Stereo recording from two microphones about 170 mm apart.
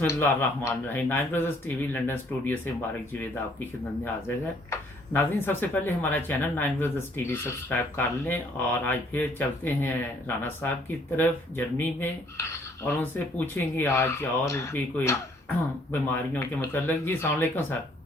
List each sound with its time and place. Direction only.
0.0 s speech: 15° left (ahead or behind)